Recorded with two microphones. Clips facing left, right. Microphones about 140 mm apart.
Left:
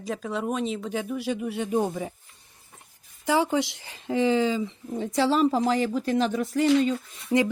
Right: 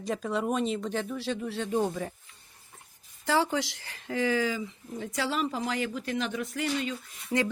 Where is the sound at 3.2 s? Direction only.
15° left (ahead or behind); by 6.7 s 35° left (ahead or behind).